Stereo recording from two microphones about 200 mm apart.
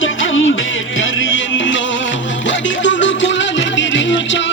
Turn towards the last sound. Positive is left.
turn(degrees=65)  # may be behind; listen again after turning